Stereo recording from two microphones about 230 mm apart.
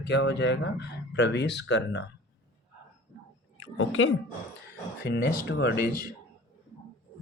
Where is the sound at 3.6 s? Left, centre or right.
Left.